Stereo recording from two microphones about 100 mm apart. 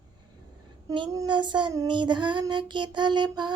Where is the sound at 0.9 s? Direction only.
50° right (ahead or behind).